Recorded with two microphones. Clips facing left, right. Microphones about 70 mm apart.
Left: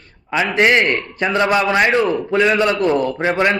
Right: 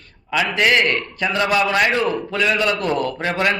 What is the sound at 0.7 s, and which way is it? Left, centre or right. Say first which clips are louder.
Speech: left 2 dB; left.